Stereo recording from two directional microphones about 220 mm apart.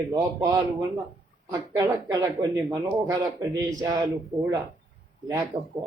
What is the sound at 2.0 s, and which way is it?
Speech, 15° right (ahead or behind).